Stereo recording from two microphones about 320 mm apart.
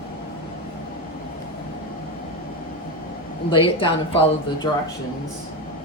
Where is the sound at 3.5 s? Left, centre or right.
Centre.